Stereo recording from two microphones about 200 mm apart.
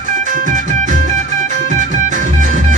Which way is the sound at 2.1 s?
40° right (ahead or behind).